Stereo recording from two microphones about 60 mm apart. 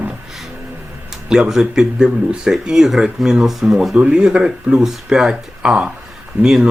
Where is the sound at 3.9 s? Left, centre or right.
Centre.